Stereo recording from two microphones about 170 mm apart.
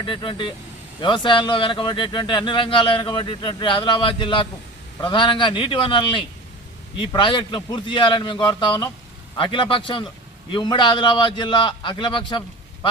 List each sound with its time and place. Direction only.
0.0 s speech: 30° left (ahead or behind)